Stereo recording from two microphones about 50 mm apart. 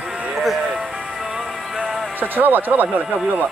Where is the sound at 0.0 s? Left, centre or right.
Centre.